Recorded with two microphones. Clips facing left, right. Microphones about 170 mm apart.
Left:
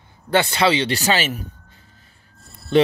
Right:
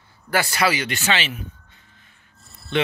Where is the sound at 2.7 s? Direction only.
40° left (ahead or behind).